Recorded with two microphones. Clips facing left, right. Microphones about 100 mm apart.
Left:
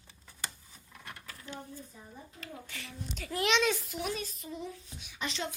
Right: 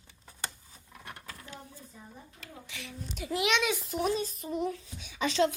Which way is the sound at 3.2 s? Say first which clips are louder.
Right 3 dB; 15° right (ahead or behind).